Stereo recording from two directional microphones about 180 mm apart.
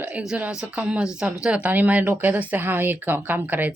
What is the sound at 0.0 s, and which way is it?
Speech, 5° right (ahead or behind).